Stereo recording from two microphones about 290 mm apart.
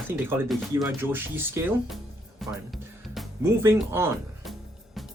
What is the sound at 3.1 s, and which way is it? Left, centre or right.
Speech, centre.